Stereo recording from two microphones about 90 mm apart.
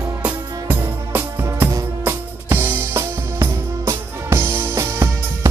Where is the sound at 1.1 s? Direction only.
30° right (ahead or behind).